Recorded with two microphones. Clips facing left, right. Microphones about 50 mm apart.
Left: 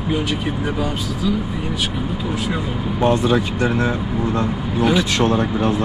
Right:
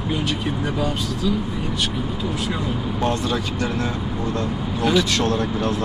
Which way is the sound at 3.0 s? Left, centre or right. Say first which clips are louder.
Left 7 dB; centre.